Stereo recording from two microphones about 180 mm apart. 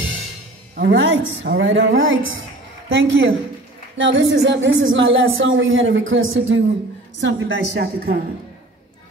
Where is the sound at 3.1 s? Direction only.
90° right; by 8.2 s 60° right (ahead or behind).